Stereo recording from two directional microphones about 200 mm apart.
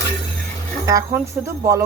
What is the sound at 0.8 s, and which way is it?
Speech, 15° right (ahead or behind).